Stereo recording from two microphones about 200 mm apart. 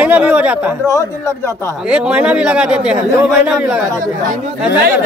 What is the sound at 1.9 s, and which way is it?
A man's voice, 5° right (ahead or behind).